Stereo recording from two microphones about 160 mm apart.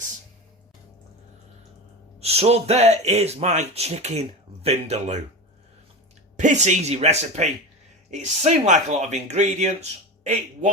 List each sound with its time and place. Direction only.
2.2 s speech: 40° right (ahead or behind)
6.4 s speech: 50° right (ahead or behind)